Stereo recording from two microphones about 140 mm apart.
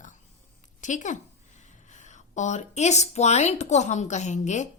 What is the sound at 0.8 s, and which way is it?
A woman's voice, 60° left (ahead or behind).